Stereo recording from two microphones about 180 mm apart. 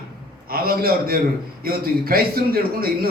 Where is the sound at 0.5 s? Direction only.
55° right (ahead or behind).